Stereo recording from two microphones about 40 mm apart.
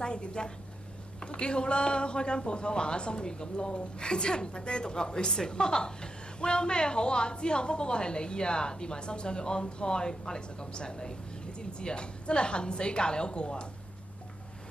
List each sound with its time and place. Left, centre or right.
0.0 s a man's voice: left